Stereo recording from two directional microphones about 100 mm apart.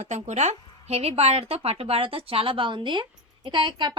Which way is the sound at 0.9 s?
90° right.